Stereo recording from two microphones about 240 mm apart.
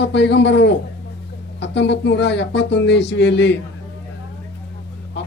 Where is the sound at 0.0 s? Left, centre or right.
Left.